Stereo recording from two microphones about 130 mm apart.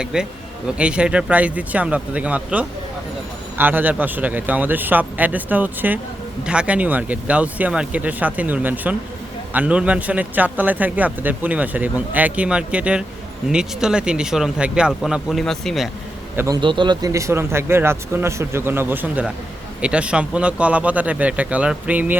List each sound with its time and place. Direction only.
0.0 s speech: 5° right (ahead or behind)
16.3 s a man's voice: 15° right (ahead or behind)
16.6 s speech: 40° right (ahead or behind); by 22.2 s 15° right (ahead or behind)